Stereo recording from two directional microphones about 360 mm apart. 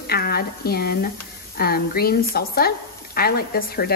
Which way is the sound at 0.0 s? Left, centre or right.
Left.